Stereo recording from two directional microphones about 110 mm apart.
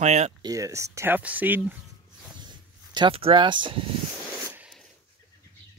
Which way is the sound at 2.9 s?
50° right (ahead or behind).